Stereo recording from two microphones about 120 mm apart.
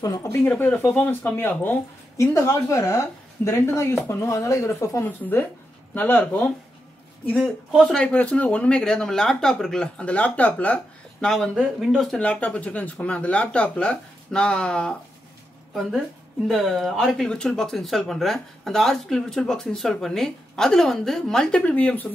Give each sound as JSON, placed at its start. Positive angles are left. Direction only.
{"t": 0.0, "sound": "a woman's voice", "side_deg": 30}
{"t": 0.4, "sound": "a woman's voice", "side_deg": 15}
{"t": 7.3, "sound": "speech", "side_deg": -5}
{"t": 16.4, "sound": "speech", "side_deg": 0}